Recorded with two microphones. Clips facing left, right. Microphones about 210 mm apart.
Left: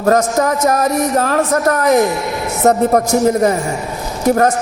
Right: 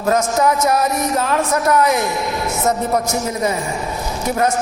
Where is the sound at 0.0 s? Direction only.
45° left (ahead or behind).